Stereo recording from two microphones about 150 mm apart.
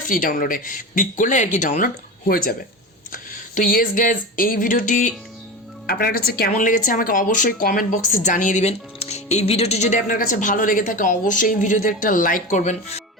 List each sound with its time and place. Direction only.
0.1 s a woman's voice: 65° left (ahead or behind)
5.8 s speech: 85° left
6.6 s a woman's voice: 60° left (ahead or behind)